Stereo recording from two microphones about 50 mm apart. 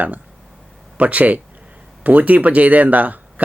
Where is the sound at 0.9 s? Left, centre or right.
Right.